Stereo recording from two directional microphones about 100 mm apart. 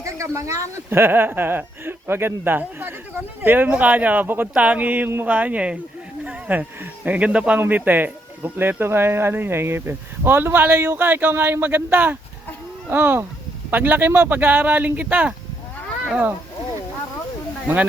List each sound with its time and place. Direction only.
0.0 s speech: 30° right (ahead or behind)